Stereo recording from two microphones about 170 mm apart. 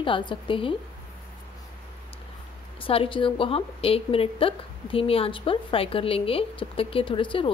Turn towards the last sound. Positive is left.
turn(degrees=30)  # may be behind; listen again after turning